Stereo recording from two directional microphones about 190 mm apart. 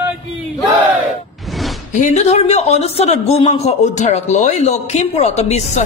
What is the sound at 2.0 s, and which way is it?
A man's voice, 40° left (ahead or behind).